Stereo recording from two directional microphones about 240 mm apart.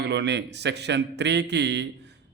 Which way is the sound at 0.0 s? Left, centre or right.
Right.